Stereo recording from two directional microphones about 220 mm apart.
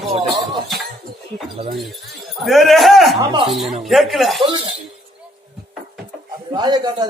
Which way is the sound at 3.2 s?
25° right (ahead or behind).